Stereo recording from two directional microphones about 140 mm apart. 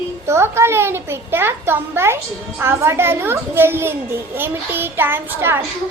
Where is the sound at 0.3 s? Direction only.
20° right (ahead or behind).